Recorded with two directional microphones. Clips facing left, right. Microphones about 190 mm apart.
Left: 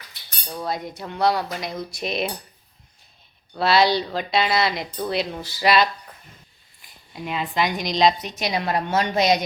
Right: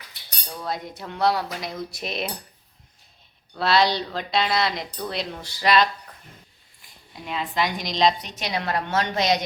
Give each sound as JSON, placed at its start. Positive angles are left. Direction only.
{"t": 0.7, "sound": "speech", "side_deg": 0}
{"t": 3.6, "sound": "speech", "side_deg": 5}
{"t": 7.1, "sound": "a woman's voice", "side_deg": 5}